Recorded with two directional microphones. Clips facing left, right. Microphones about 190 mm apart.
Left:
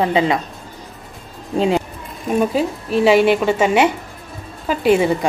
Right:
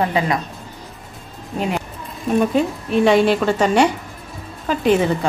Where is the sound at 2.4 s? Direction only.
5° left (ahead or behind).